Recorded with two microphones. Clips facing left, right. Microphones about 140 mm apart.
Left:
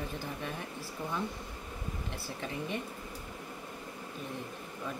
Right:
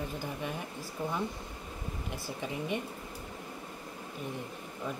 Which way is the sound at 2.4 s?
15° right (ahead or behind).